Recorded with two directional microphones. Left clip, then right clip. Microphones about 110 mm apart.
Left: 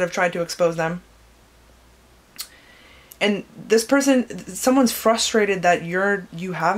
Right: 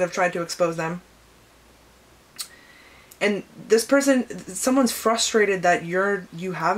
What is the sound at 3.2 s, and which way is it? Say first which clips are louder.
Speech: left 2 dB; 30° left (ahead or behind).